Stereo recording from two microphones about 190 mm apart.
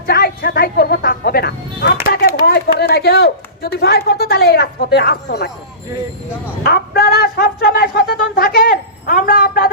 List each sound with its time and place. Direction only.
0.1 s speech: 50° left (ahead or behind)
2.0 s a sound: 50° left (ahead or behind)
3.8 s speech: 55° left (ahead or behind)
6.6 s speech: 55° left (ahead or behind)